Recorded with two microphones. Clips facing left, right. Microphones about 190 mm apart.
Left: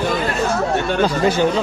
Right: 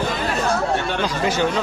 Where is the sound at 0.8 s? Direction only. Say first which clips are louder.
Left 5 dB; 50° left (ahead or behind).